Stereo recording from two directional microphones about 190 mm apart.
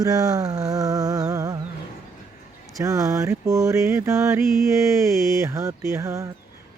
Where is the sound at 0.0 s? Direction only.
20° right (ahead or behind).